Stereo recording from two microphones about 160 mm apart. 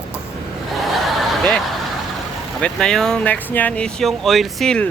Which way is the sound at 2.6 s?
5° left (ahead or behind).